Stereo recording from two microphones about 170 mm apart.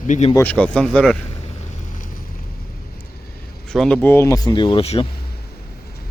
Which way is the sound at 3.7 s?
5° left (ahead or behind).